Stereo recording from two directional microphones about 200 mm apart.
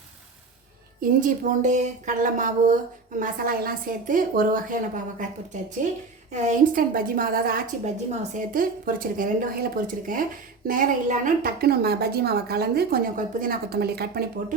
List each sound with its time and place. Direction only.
1.2 s a woman's voice: 40° right (ahead or behind)
6.3 s a woman's voice: 35° right (ahead or behind)